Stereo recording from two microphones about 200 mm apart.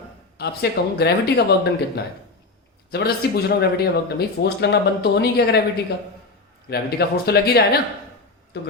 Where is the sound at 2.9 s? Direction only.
55° left (ahead or behind).